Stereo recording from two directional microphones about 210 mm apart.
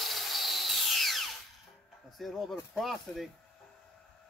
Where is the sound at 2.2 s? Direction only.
Centre (ahead or behind).